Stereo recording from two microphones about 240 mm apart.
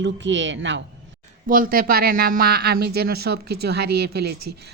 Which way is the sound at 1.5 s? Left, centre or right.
Right.